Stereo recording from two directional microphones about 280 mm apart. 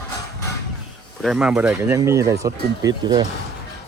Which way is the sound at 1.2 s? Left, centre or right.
Centre.